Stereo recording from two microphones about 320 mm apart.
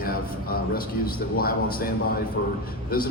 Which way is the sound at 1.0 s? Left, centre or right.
Left.